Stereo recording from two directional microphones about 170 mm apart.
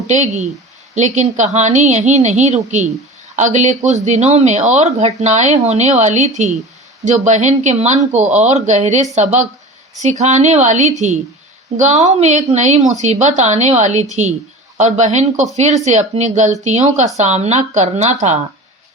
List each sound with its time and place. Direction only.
0.1 s speech: 45° right (ahead or behind)